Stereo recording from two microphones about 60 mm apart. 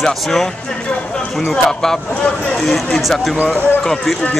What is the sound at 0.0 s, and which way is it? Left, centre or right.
Speech, centre.